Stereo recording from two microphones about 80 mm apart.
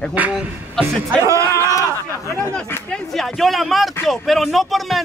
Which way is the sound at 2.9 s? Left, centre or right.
Centre.